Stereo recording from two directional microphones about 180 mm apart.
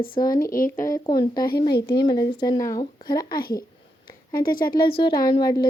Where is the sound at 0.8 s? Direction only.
20° left (ahead or behind).